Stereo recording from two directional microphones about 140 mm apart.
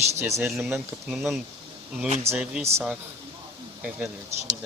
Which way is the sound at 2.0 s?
55° right (ahead or behind).